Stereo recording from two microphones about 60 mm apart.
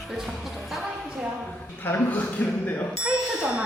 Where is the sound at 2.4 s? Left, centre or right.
Left.